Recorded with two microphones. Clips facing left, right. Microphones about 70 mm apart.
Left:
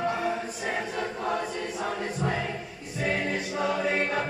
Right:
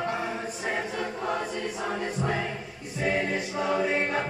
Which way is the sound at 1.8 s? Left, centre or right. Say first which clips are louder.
Left 1 dB; right.